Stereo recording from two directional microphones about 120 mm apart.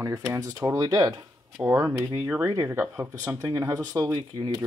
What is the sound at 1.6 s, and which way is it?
Speech, 20° right (ahead or behind).